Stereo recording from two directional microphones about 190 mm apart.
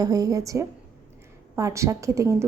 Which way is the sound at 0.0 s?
20° right (ahead or behind).